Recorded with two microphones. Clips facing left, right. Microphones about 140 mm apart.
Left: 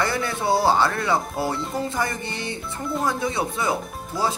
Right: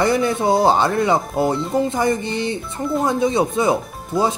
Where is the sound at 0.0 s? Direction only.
20° right (ahead or behind).